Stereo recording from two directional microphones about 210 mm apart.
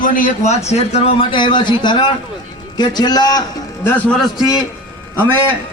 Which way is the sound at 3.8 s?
5° left (ahead or behind).